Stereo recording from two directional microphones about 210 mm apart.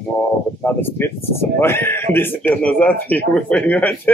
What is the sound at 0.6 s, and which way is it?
Speech, 10° left (ahead or behind).